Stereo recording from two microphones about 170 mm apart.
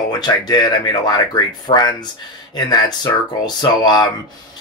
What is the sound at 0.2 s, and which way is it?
Speech, 25° left (ahead or behind).